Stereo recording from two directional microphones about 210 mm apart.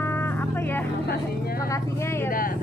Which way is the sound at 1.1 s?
45° left (ahead or behind).